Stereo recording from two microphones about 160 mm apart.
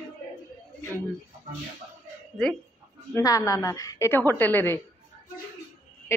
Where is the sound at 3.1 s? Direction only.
20° left (ahead or behind).